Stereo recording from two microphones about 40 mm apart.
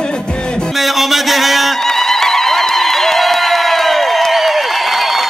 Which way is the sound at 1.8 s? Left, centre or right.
Centre.